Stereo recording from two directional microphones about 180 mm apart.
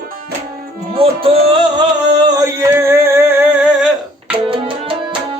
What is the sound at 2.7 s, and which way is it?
Music, 15° right (ahead or behind).